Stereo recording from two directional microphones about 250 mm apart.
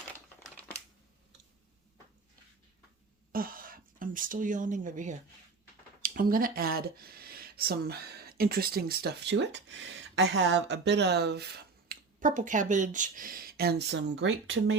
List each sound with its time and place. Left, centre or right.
3.3 s speech: right